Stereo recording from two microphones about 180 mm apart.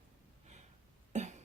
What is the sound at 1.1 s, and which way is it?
Cough, 40° right (ahead or behind).